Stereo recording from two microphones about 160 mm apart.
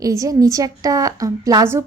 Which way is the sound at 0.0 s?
20° right (ahead or behind).